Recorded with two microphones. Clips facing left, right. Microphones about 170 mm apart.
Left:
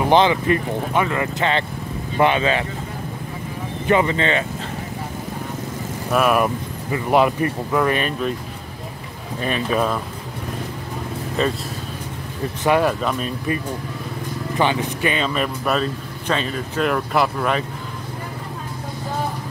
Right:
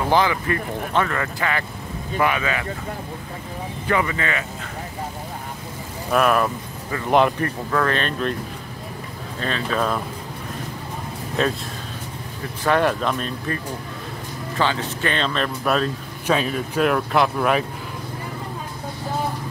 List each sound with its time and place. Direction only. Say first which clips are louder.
0.1 s speech: left 4 dB; 20° left (ahead or behind)
3.8 s speech: left 5 dB; 25° left (ahead or behind)
6.1 s speech: left 1 dB; 10° left (ahead or behind)
9.4 s speech: left 3 dB; 15° left (ahead or behind)
11.4 s speech: left 1 dB; centre (ahead or behind)
12.8 s speech: left 1 dB; 5° left (ahead or behind)
14.6 s speech: left 2 dB; 15° left (ahead or behind); by 17.6 s 5° right (ahead or behind)